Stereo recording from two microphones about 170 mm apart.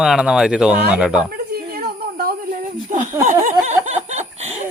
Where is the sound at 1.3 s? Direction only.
65° right (ahead or behind).